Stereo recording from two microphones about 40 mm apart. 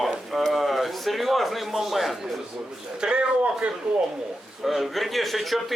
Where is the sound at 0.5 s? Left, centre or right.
Centre.